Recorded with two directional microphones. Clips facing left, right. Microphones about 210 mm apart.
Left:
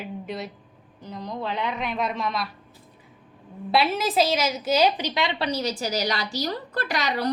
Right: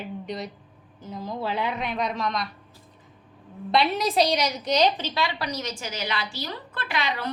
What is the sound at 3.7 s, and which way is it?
A woman's voice, 5° left (ahead or behind).